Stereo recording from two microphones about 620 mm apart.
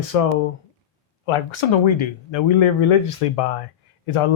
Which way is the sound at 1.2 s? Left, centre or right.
Left.